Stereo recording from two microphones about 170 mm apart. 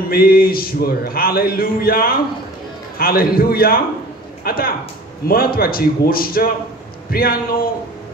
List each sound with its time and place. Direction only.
0.1 s speech: 60° left (ahead or behind)